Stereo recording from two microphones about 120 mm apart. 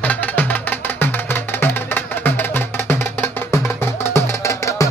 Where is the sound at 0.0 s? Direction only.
15° left (ahead or behind).